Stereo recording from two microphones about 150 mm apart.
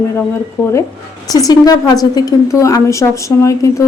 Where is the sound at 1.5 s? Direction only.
25° left (ahead or behind).